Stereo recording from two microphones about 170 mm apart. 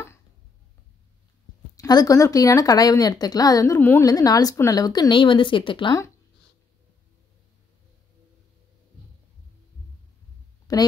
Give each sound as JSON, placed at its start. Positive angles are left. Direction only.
{"t": 1.8, "sound": "speech", "side_deg": 20}
{"t": 10.7, "sound": "a woman's voice", "side_deg": 20}